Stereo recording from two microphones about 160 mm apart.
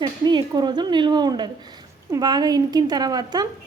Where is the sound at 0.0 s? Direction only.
25° right (ahead or behind).